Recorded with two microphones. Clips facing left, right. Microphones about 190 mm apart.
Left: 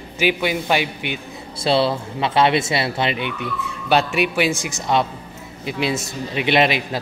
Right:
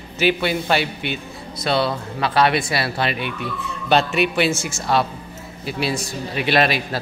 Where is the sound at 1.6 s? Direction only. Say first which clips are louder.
Left 3 dB; 25° left (ahead or behind).